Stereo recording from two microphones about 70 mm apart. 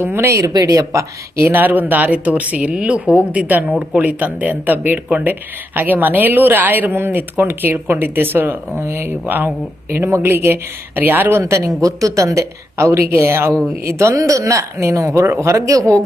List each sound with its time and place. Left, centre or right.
0.0 s speech: right
0.5 s speech: right